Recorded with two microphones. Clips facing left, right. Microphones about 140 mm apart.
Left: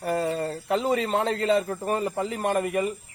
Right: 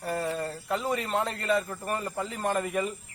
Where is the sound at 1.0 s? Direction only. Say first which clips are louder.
Left 5 dB; 90° left.